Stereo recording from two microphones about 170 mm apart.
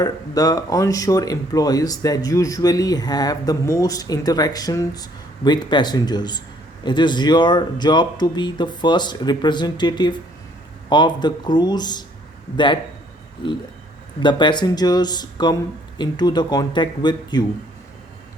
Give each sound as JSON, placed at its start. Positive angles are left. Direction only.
{"t": 0.0, "sound": "speech", "side_deg": 20}
{"t": 14.2, "sound": "speech", "side_deg": 25}